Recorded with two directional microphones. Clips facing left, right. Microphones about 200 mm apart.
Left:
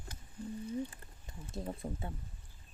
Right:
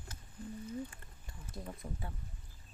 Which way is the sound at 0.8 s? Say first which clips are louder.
Left 2 dB; 25° left (ahead or behind).